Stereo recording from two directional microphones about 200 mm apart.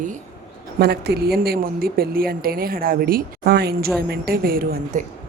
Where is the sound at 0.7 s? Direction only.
55° right (ahead or behind).